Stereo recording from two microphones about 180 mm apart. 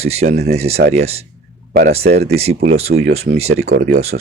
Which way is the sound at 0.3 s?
60° right (ahead or behind).